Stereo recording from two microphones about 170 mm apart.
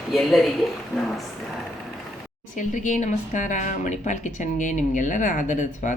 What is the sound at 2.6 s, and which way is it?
Speech, 45° left (ahead or behind).